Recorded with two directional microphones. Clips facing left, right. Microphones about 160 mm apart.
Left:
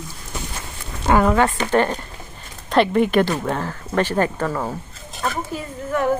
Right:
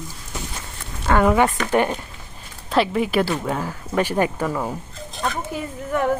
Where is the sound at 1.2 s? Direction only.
10° right (ahead or behind).